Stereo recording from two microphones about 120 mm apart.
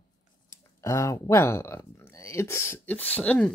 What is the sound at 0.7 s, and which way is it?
Speech, 25° left (ahead or behind).